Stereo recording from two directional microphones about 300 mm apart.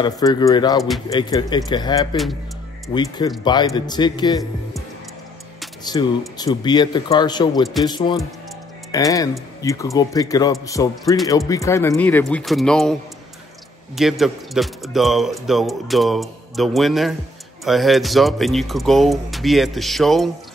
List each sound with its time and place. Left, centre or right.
0.0 s speech: centre
5.9 s speech: centre
13.9 s a man's voice: centre